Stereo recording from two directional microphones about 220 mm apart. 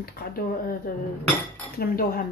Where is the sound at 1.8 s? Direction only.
40° left (ahead or behind).